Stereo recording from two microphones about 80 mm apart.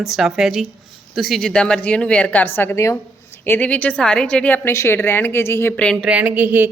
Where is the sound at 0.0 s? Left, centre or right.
Centre.